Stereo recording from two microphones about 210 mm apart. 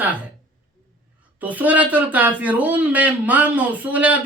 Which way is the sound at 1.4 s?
5° right (ahead or behind).